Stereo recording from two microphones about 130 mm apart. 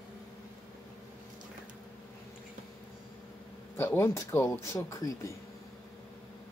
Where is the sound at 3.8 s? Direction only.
20° left (ahead or behind).